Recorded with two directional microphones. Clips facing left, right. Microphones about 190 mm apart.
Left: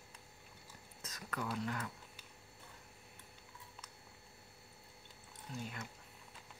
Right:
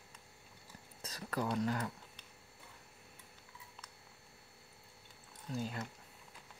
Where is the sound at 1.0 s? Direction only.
35° right (ahead or behind).